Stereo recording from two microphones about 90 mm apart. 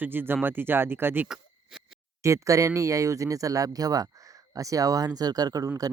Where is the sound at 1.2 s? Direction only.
5° right (ahead or behind).